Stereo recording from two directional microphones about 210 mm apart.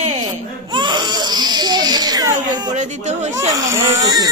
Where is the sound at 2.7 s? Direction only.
35° right (ahead or behind).